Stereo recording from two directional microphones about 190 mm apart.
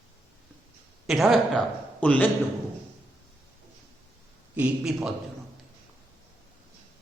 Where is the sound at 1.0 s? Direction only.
Centre (ahead or behind).